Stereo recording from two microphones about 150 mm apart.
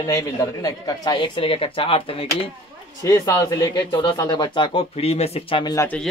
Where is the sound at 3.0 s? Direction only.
25° left (ahead or behind).